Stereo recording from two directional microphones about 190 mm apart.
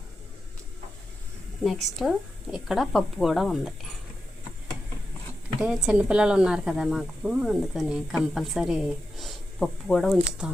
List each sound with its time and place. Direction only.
1.6 s speech: centre (ahead or behind)
5.5 s speech: 5° right (ahead or behind)